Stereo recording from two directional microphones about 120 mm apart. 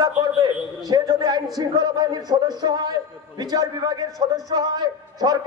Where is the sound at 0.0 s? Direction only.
35° right (ahead or behind).